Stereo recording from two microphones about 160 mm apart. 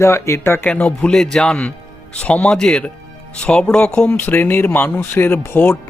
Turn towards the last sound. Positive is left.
turn(degrees=15)  # may be behind; listen again after turning